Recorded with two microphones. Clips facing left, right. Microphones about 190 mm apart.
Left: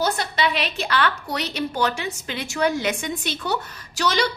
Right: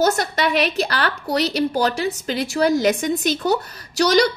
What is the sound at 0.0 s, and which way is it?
A woman's voice, 45° right (ahead or behind).